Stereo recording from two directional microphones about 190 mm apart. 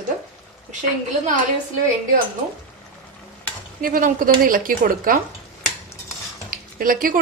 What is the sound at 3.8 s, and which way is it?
A woman's voice, 50° right (ahead or behind).